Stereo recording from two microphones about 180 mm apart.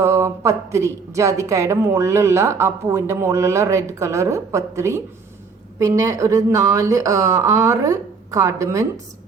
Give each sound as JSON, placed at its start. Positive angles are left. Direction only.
{"t": 0.0, "sound": "speech", "side_deg": -15}